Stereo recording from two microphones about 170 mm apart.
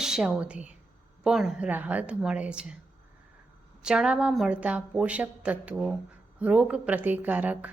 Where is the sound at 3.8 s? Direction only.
5° right (ahead or behind).